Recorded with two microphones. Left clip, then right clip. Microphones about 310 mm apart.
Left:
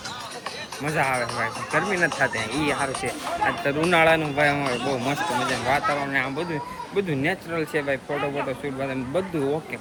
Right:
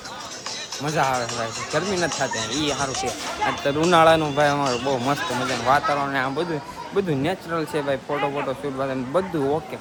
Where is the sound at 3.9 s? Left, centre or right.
Centre.